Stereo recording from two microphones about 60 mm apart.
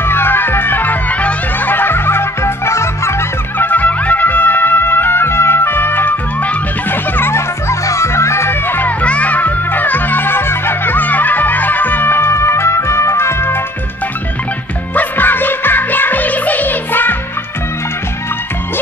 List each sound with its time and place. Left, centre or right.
0.0 s music: left
3.5 s music: left
9.0 s music: left
15.0 s music: left